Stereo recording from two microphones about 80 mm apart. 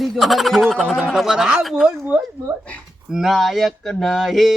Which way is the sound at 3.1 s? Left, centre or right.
Centre.